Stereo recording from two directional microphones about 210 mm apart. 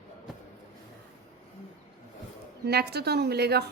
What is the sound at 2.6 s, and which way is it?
A woman's voice, 50° right (ahead or behind).